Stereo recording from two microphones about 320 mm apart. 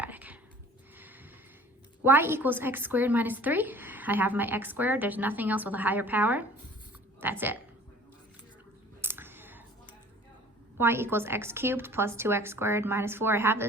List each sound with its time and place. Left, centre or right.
0.0 s whispering: centre
2.0 s a woman's voice: centre
9.0 s clicking: centre
10.8 s a woman's voice: centre